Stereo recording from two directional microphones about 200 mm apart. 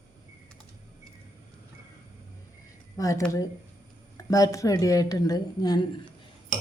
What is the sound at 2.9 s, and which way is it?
Speech, 15° left (ahead or behind).